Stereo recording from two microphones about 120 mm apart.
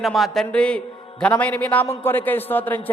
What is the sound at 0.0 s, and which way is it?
A man's voice, centre (ahead or behind).